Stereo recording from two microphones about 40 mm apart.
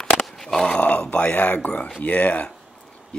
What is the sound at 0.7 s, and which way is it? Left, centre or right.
Speech, left.